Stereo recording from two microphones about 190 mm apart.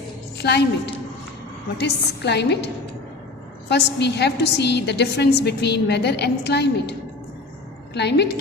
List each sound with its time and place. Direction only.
0.3 s a woman's voice: 60° left (ahead or behind)
3.7 s a woman's voice: 65° left (ahead or behind)
7.9 s a woman's voice: 60° left (ahead or behind)